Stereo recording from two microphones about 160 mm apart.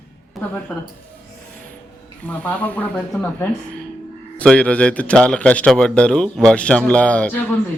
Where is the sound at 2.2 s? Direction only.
10° left (ahead or behind).